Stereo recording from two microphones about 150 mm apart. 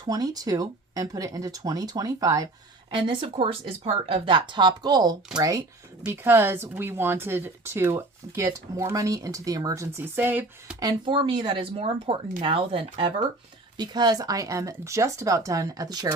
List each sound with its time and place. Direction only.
0.0 s speech: 25° right (ahead or behind)
2.9 s speech: 35° right (ahead or behind); by 10.8 s 10° right (ahead or behind)
10.8 s speech: 30° right (ahead or behind)